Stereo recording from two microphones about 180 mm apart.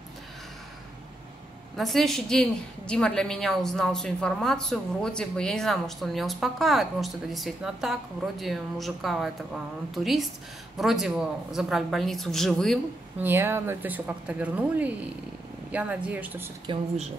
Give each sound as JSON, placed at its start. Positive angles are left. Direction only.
{"t": 1.8, "sound": "a woman's voice", "side_deg": 0}
{"t": 13.2, "sound": "speech", "side_deg": -10}
{"t": 16.6, "sound": "speech", "side_deg": -35}